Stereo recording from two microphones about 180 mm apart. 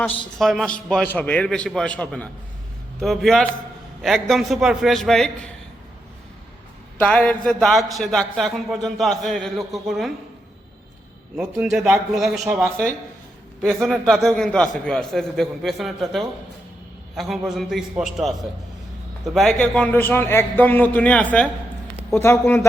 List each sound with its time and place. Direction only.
0.3 s a man's voice: centre (ahead or behind)
7.0 s a man's voice: 5° left (ahead or behind)
11.3 s a man's voice: 5° right (ahead or behind)
13.6 s a man's voice: centre (ahead or behind)